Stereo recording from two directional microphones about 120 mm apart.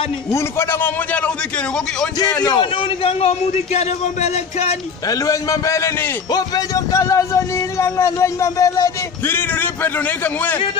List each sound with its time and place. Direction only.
0.3 s a man's voice: 20° left (ahead or behind)
2.4 s a man's voice: 40° left (ahead or behind); by 4.7 s 65° left (ahead or behind)
5.0 s a man's voice: 30° left (ahead or behind)